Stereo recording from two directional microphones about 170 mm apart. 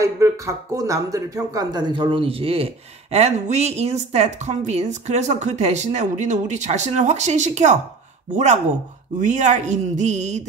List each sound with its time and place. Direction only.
0.0 s speech: 15° right (ahead or behind); by 7.8 s 45° right (ahead or behind)
9.2 s speech: 45° right (ahead or behind)